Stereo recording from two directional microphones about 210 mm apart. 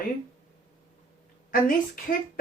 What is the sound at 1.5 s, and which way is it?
Speech, 40° left (ahead or behind).